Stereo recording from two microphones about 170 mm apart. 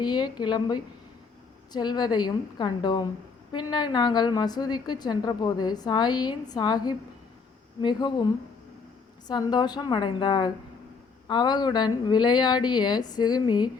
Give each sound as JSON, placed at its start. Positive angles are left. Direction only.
{"t": 0.0, "sound": "a woman's voice", "side_deg": 25}